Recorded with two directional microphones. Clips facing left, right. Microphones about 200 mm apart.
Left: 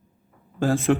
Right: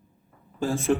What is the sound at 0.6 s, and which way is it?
Speech, 90° left.